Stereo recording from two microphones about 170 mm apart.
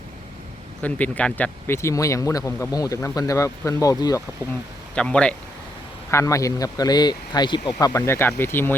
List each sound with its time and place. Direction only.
0.8 s speech: 10° left (ahead or behind)
4.9 s speech: 5° left (ahead or behind)
6.1 s speech: 15° left (ahead or behind)